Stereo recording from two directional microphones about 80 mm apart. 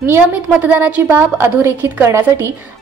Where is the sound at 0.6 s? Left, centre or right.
Right.